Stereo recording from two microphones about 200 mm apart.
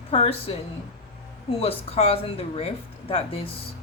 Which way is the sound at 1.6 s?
30° left (ahead or behind).